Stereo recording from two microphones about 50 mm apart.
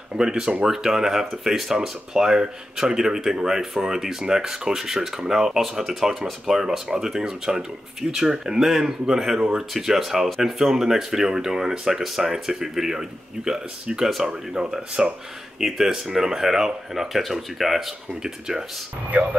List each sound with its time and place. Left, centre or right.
0.1 s speech: centre
14.6 s speech: right
15.6 s speech: centre